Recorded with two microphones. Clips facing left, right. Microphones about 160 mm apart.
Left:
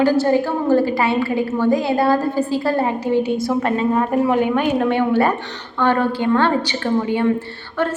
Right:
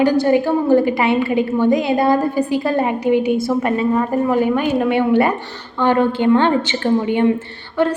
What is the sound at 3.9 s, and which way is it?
A woman's voice, 5° left (ahead or behind).